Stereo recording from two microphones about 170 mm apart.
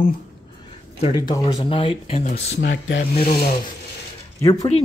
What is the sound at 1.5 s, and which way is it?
Speech, 30° left (ahead or behind).